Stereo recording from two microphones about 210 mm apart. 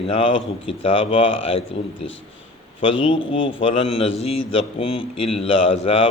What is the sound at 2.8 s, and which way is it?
Speech, 25° left (ahead or behind).